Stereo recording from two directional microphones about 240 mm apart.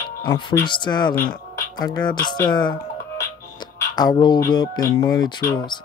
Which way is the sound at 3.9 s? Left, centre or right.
Centre.